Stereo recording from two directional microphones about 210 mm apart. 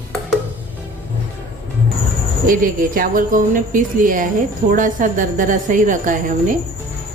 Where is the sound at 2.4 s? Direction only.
40° right (ahead or behind).